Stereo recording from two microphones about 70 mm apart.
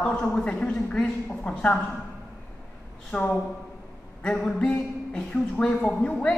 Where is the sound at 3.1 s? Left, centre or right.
Left.